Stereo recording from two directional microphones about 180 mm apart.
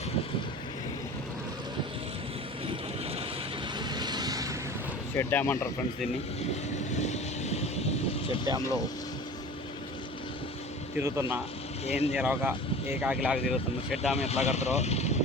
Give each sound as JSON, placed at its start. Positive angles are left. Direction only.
{"t": 3.8, "sound": "vehicle", "side_deg": -25}
{"t": 5.1, "sound": "speech", "side_deg": 10}
{"t": 6.4, "sound": "vehicle", "side_deg": 40}
{"t": 8.5, "sound": "speech", "side_deg": -25}
{"t": 10.9, "sound": "speech", "side_deg": -15}
{"t": 11.9, "sound": "speech", "side_deg": 35}
{"t": 12.1, "sound": "speech", "side_deg": -10}
{"t": 14.1, "sound": "speech", "side_deg": 35}